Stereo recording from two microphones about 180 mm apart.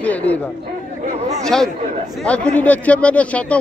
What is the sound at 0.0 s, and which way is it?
Chatter, 10° left (ahead or behind).